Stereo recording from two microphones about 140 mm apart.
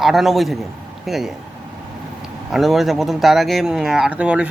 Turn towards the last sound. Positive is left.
turn(degrees=-10)  # may be behind; listen again after turning